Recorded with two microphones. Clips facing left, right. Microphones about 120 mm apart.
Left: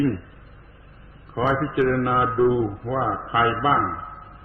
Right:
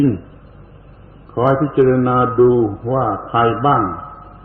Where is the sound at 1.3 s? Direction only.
30° right (ahead or behind).